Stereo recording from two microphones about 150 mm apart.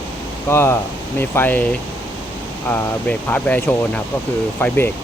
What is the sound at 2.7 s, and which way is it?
Speech, 10° left (ahead or behind).